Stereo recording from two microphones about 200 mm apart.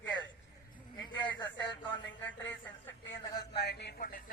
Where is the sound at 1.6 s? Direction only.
65° left (ahead or behind).